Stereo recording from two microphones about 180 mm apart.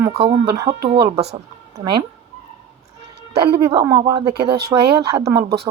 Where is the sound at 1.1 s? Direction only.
35° right (ahead or behind).